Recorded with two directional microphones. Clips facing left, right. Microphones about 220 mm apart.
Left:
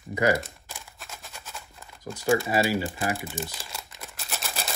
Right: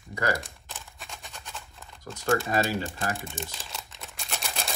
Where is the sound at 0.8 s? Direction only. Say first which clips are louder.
Even; centre (ahead or behind).